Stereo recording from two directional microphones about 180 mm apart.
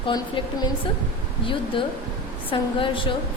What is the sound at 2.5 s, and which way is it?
Speech, 30° left (ahead or behind).